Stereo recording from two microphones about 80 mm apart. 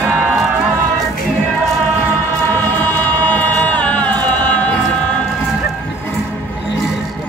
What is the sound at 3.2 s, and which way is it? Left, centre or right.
Music, left.